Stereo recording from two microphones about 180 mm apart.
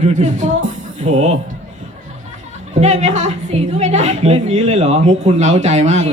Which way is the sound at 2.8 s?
40° right (ahead or behind).